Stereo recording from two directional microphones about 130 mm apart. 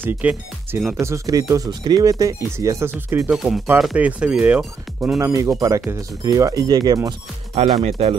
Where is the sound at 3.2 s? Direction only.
5° right (ahead or behind).